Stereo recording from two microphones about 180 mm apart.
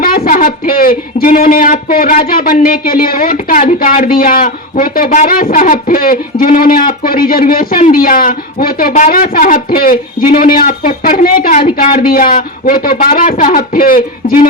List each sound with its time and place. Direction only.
0.0 s speech: 50° left (ahead or behind)